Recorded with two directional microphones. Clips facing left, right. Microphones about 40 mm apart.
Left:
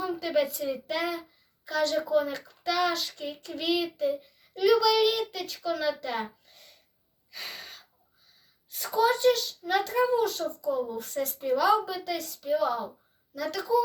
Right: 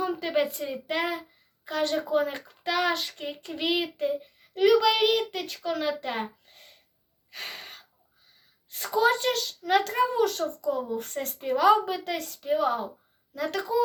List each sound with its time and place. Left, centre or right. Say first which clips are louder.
0.0 s a child's voice: right 1 dB; right
7.3 s gasp: right 2 dB; right
8.7 s a child's voice: right 1 dB; right